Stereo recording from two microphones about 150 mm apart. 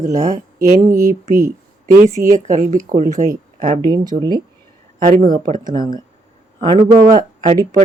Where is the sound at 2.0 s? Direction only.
55° right (ahead or behind).